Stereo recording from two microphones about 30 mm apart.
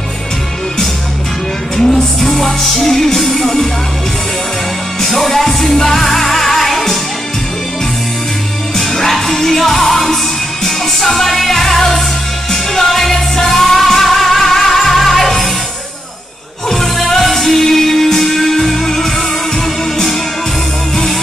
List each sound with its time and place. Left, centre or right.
1.8 s music: centre
2.2 s music: centre
5.1 s music: centre
8.7 s music: centre
16.6 s music: centre